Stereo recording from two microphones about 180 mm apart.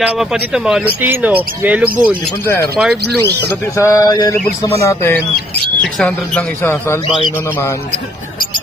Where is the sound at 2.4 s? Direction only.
15° left (ahead or behind).